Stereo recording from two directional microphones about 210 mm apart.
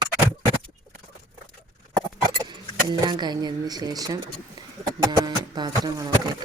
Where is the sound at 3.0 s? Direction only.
20° right (ahead or behind).